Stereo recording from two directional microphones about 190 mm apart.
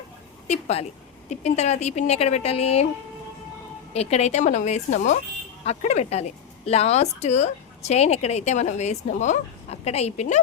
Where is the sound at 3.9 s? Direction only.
35° left (ahead or behind).